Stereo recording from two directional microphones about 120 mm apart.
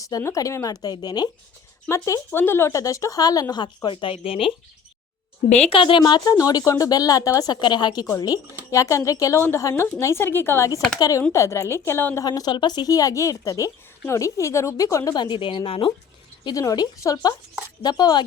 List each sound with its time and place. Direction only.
0.0 s a woman's voice: 25° left (ahead or behind)
3.8 s speech: 45° left (ahead or behind)
5.7 s a woman's voice: 45° left (ahead or behind); by 12.2 s 20° left (ahead or behind)
12.2 s a woman's voice: 35° left (ahead or behind); by 15.9 s 50° left (ahead or behind)
16.4 s a woman's voice: 30° left (ahead or behind)